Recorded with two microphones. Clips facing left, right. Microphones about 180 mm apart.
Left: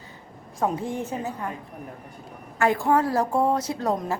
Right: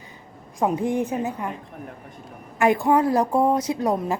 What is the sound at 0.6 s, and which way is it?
Speech, 15° right (ahead or behind).